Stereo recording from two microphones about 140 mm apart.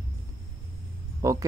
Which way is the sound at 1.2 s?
25° right (ahead or behind).